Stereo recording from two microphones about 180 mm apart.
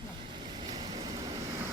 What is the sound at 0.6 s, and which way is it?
Vehicle, 25° right (ahead or behind).